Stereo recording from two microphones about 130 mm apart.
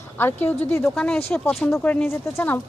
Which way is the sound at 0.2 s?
15° left (ahead or behind).